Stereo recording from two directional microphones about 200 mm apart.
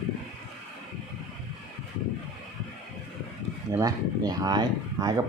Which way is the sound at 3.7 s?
15° right (ahead or behind).